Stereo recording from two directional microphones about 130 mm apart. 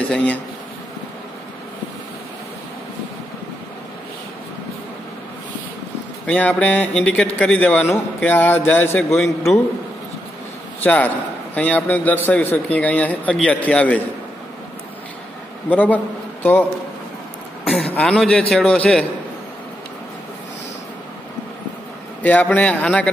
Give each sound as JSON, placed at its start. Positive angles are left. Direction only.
{"t": 0.1, "sound": "a man's voice", "side_deg": 10}
{"t": 6.2, "sound": "a man's voice", "side_deg": 10}
{"t": 10.8, "sound": "a man's voice", "side_deg": 10}
{"t": 15.7, "sound": "a man's voice", "side_deg": 15}
{"t": 17.6, "sound": "a man's voice", "side_deg": 10}
{"t": 22.2, "sound": "a man's voice", "side_deg": 10}